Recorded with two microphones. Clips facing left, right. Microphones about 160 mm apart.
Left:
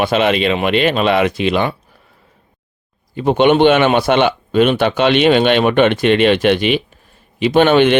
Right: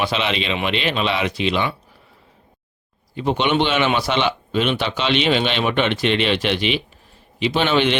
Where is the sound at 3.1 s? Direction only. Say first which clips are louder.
Left 7 dB; 50° left (ahead or behind).